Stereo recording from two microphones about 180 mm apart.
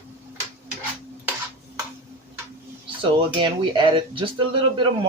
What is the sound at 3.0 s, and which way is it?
Speech, 30° right (ahead or behind).